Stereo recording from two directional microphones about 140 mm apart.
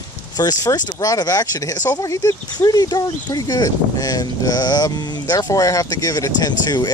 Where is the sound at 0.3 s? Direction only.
25° left (ahead or behind).